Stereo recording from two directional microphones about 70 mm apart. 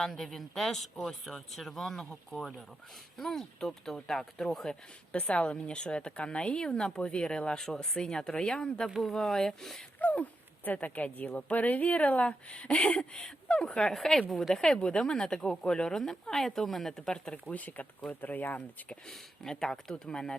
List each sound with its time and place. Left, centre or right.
0.0 s speech: centre
10.0 s speech: left
17.3 s speech: left
19.0 s speech: centre